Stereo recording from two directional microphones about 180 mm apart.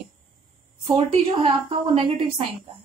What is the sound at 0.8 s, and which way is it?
Speech, 30° right (ahead or behind).